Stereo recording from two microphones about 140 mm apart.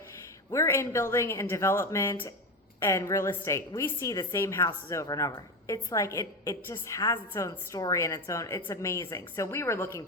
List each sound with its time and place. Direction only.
0.5 s a woman's voice: 20° left (ahead or behind)